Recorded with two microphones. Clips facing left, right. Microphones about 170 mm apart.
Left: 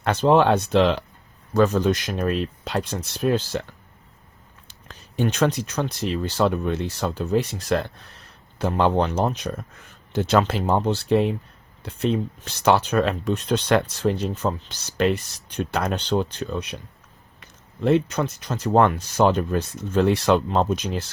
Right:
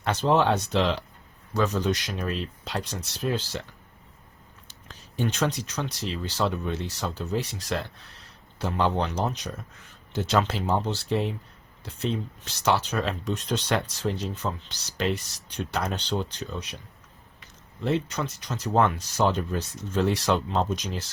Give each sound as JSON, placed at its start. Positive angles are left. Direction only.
{"t": 0.0, "sound": "speech", "side_deg": 55}
{"t": 4.7, "sound": "speech", "side_deg": 60}
{"t": 17.8, "sound": "speech", "side_deg": 55}